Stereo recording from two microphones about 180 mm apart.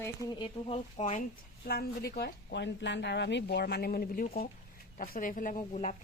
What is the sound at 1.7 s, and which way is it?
Speech, 60° left (ahead or behind).